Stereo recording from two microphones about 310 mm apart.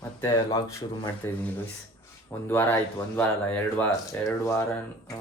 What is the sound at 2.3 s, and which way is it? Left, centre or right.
Speech, centre.